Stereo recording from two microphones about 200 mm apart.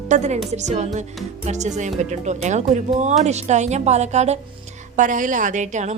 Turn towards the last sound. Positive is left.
turn(degrees=-35)  # may be behind; listen again after turning